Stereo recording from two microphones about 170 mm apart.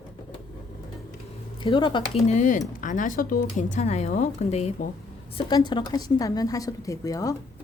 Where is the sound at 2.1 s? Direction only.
45° left (ahead or behind).